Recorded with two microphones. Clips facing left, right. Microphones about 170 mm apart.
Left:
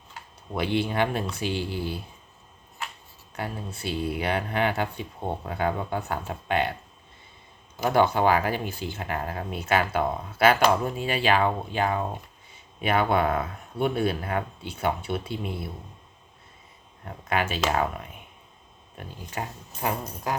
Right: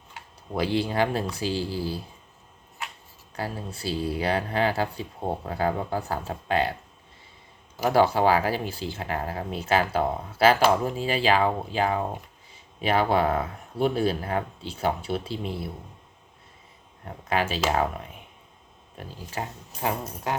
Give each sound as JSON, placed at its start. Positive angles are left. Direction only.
{"t": 0.5, "sound": "speech", "side_deg": -35}
{"t": 3.3, "sound": "speech", "side_deg": -30}
{"t": 7.9, "sound": "speech", "side_deg": -35}
{"t": 17.1, "sound": "speech", "side_deg": -35}
{"t": 19.3, "sound": "speech", "side_deg": -25}